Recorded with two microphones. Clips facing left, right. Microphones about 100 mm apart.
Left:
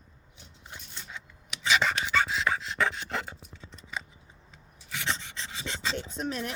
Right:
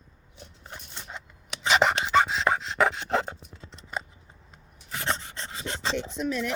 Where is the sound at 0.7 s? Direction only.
35° right (ahead or behind).